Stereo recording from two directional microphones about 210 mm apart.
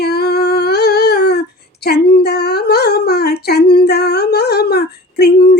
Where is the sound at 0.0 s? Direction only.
50° left (ahead or behind).